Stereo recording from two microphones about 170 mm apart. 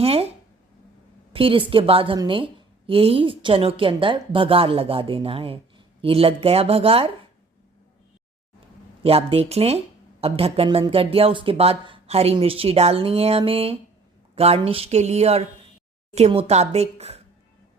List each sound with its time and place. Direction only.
0.0 s a woman's voice: 35° right (ahead or behind)
1.3 s a woman's voice: 30° right (ahead or behind)
9.0 s a woman's voice: 35° right (ahead or behind)